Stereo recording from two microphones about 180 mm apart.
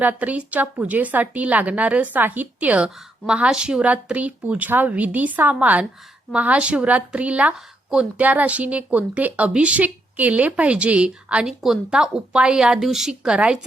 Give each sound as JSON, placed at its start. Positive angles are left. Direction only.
{"t": 0.0, "sound": "a woman's voice", "side_deg": -10}